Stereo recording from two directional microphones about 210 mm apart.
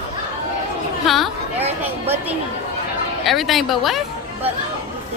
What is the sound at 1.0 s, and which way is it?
Speech, centre (ahead or behind).